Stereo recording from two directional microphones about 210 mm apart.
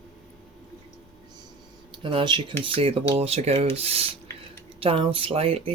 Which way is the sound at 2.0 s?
25° right (ahead or behind).